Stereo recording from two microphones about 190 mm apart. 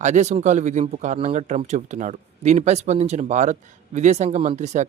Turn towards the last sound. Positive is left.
turn(degrees=-35)  # may be behind; listen again after turning